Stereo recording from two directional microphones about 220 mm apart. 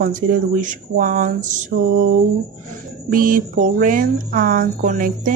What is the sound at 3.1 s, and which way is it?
Speech, 40° right (ahead or behind).